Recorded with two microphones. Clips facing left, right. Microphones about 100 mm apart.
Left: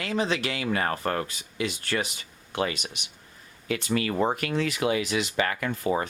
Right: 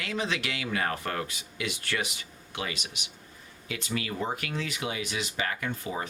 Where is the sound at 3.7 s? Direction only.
55° left (ahead or behind).